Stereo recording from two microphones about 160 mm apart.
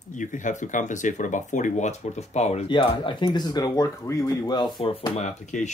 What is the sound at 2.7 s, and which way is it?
Speech, 30° left (ahead or behind).